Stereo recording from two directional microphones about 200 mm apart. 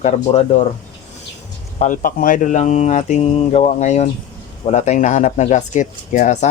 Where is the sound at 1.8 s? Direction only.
40° left (ahead or behind).